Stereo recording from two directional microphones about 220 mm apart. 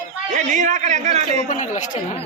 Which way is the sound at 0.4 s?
35° right (ahead or behind).